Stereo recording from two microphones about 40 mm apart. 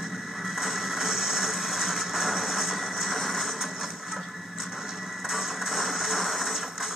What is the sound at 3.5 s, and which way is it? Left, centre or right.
Music, centre.